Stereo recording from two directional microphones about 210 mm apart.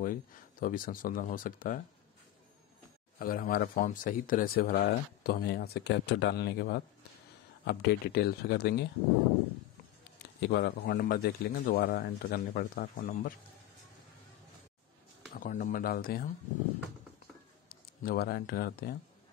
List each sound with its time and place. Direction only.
0.0 s speech: 40° left (ahead or behind)
3.2 s speech: 45° left (ahead or behind)
10.4 s speech: 55° left (ahead or behind)
15.4 s speech: 40° left (ahead or behind)
18.0 s speech: 45° left (ahead or behind)